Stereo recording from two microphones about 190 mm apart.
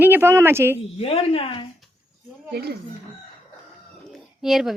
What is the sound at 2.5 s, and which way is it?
Speech, 60° right (ahead or behind).